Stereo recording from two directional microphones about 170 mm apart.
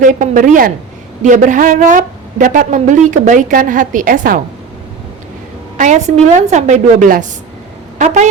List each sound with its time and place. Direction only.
0.0 s a woman's voice: 50° right (ahead or behind)
5.7 s a woman's voice: 45° right (ahead or behind)